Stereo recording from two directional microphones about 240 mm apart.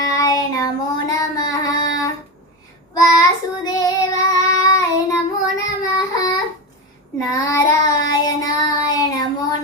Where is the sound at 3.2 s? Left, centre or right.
Centre.